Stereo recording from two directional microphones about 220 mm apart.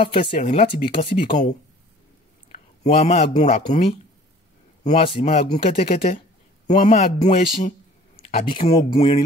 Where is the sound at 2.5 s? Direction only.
30° left (ahead or behind).